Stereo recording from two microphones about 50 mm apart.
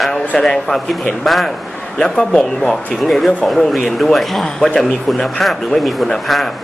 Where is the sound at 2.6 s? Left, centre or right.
Centre.